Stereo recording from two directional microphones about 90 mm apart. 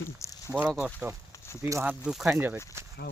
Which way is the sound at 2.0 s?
5° right (ahead or behind).